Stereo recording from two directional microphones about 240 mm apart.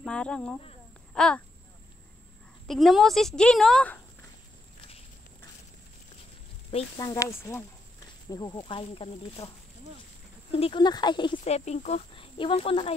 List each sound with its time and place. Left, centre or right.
0.0 s speech: centre
1.1 s a sound: centre
2.7 s a woman's voice: centre
6.7 s speech: left
7.1 s speech: centre
10.5 s speech: left